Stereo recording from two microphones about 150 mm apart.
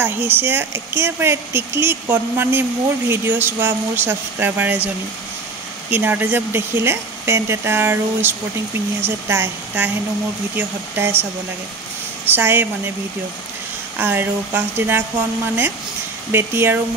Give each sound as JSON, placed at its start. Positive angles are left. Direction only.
{"t": 0.0, "sound": "speech", "side_deg": -15}
{"t": 12.3, "sound": "speech", "side_deg": -15}
{"t": 13.9, "sound": "speech", "side_deg": -15}
{"t": 16.3, "sound": "speech", "side_deg": -15}